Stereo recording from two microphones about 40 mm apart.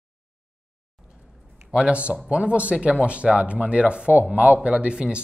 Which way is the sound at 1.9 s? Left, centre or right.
Right.